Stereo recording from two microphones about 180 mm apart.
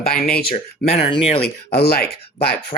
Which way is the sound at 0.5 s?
35° left (ahead or behind).